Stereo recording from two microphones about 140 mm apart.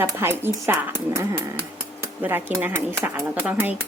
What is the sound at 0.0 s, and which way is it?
Speech, 15° right (ahead or behind).